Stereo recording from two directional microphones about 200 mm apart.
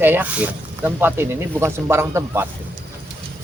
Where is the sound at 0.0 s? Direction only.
10° right (ahead or behind).